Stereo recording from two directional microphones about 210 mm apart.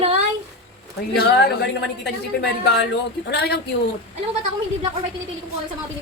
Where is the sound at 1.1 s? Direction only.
50° left (ahead or behind).